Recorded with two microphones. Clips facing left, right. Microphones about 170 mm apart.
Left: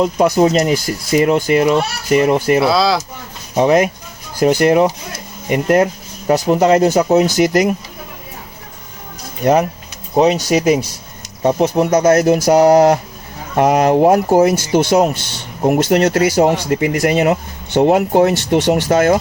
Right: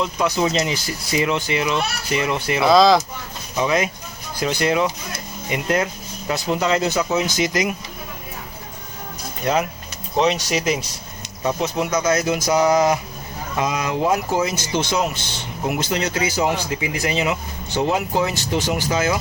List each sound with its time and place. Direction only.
0.0 s speech: 45° left (ahead or behind)
2.6 s speech: 5° left (ahead or behind)
3.5 s speech: 50° left (ahead or behind)
7.3 s speech: 55° left (ahead or behind)
9.4 s speech: 40° left (ahead or behind)
11.4 s speech: 50° left (ahead or behind)
12.5 s speech: 65° left (ahead or behind)